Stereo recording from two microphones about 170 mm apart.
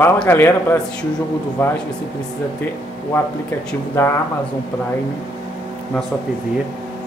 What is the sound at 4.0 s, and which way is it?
Speech, 15° left (ahead or behind).